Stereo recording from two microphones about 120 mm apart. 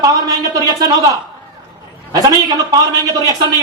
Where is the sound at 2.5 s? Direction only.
35° right (ahead or behind).